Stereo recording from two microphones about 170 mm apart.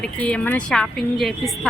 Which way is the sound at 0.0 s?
5° left (ahead or behind).